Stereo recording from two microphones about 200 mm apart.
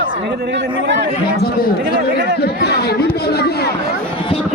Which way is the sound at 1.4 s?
50° left (ahead or behind).